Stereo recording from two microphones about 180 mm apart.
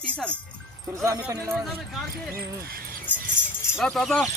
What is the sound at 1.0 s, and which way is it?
Speech, 15° right (ahead or behind).